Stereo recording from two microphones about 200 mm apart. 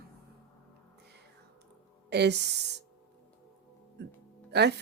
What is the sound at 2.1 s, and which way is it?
Speech, 60° right (ahead or behind).